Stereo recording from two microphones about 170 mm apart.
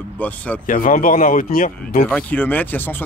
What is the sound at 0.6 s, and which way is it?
Speech, 50° left (ahead or behind).